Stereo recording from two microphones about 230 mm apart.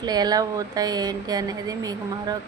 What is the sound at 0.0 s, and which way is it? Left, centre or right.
Speech, centre.